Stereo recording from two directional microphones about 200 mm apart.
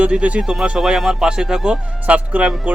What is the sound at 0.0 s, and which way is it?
Speech, 5° right (ahead or behind).